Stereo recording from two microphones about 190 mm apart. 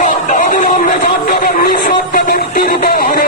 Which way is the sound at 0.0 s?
40° left (ahead or behind).